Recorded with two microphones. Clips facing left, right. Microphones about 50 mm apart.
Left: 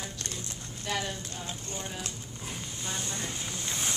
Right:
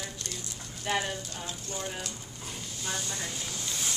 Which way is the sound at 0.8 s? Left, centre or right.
Right.